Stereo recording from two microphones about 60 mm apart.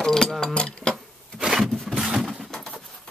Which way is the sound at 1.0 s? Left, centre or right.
Centre.